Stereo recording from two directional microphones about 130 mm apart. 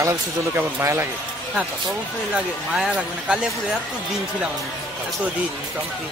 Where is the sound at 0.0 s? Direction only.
20° right (ahead or behind).